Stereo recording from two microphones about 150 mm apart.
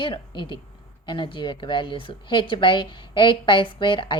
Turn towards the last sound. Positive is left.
turn(degrees=35)  # may be behind; listen again after turning